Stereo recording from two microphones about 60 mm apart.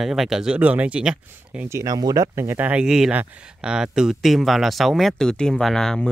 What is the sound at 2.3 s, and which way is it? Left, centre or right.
Speech, right.